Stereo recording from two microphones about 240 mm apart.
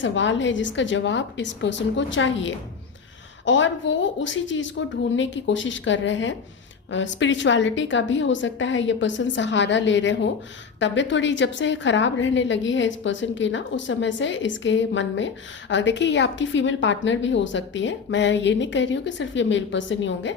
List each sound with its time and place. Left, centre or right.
0.0 s a woman's voice: left